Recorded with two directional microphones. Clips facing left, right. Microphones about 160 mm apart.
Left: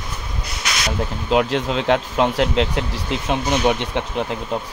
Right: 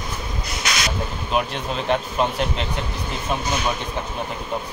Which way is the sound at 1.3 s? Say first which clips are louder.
Left 6 dB; 90° left.